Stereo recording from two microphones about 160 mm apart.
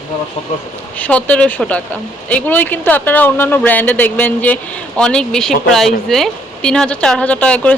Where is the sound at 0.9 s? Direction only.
10° left (ahead or behind).